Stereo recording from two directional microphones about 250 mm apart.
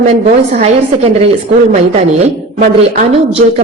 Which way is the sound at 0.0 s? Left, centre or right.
Right.